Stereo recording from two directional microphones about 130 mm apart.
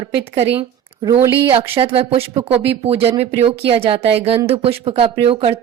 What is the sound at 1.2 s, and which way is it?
Speech, 15° right (ahead or behind).